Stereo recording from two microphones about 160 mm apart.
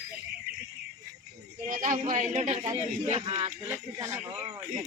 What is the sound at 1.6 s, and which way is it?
Speech, 55° right (ahead or behind).